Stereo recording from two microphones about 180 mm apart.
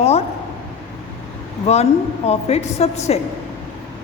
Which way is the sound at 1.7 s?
35° left (ahead or behind).